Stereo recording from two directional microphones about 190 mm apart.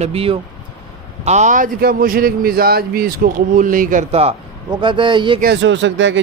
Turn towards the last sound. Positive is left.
turn(degrees=-80)